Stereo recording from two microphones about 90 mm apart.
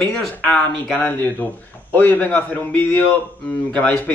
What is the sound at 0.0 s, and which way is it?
Speech, 10° left (ahead or behind).